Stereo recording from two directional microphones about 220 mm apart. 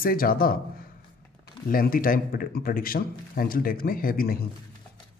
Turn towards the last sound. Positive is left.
turn(degrees=40)  # may be behind; listen again after turning